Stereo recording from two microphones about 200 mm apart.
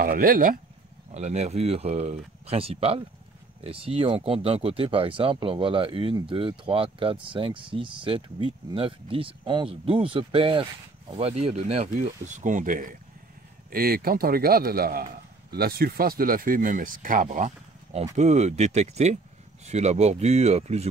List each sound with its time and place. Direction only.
0.0 s speech: 45° right (ahead or behind)
1.1 s speech: 35° right (ahead or behind)